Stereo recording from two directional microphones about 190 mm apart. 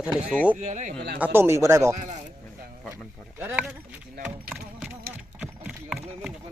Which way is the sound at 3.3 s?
10° right (ahead or behind).